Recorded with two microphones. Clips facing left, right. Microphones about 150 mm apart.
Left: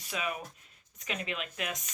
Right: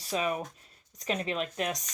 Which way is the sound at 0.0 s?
35° right (ahead or behind).